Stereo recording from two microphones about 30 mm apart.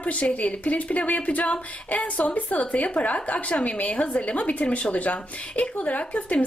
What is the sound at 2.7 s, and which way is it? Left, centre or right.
A woman's voice, left.